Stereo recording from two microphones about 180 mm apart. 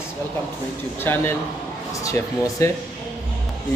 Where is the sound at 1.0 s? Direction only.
10° left (ahead or behind).